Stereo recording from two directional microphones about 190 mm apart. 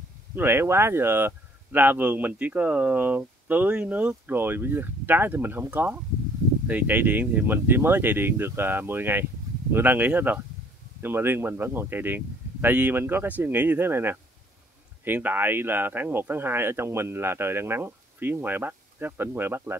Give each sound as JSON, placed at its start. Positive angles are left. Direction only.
{"t": 0.4, "sound": "speech", "side_deg": -10}